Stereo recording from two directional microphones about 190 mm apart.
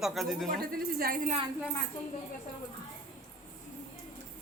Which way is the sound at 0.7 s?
50° right (ahead or behind).